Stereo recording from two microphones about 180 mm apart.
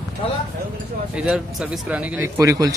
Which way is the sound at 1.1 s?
5° right (ahead or behind).